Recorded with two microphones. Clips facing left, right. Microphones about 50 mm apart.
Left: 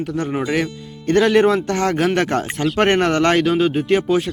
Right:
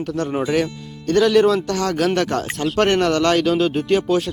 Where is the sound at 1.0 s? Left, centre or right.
Left.